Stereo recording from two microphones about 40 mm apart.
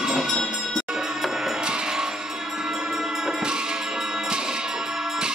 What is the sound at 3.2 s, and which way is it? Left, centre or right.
Music, centre.